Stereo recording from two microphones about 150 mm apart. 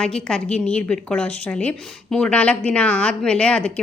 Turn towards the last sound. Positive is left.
turn(degrees=5)  # may be behind; listen again after turning